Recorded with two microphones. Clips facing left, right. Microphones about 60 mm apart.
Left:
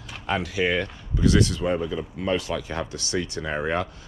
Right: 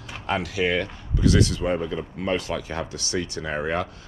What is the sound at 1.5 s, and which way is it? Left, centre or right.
Speech, right.